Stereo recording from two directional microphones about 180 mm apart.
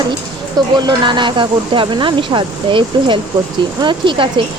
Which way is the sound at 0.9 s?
25° right (ahead or behind).